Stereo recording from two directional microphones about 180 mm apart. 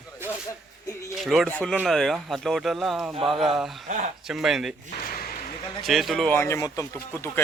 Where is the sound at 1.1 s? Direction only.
Centre (ahead or behind).